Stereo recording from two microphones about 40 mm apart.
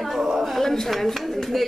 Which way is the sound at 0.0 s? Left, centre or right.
Centre.